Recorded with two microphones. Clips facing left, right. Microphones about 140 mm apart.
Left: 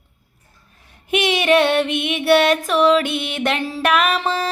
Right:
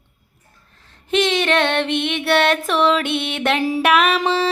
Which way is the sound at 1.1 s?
10° left (ahead or behind).